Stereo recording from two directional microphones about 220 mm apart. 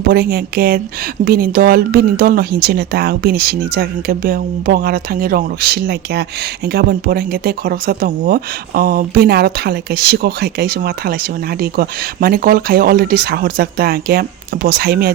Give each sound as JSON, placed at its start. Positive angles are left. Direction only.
{"t": 0.1, "sound": "speech", "side_deg": -45}